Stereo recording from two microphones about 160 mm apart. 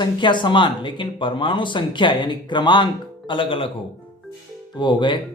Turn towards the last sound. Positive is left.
turn(degrees=30)  # may be behind; listen again after turning